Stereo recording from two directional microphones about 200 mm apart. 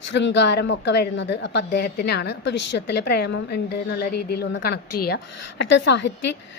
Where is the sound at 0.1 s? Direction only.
60° left (ahead or behind).